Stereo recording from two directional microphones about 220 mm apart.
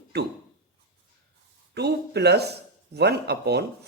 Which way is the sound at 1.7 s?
50° right (ahead or behind).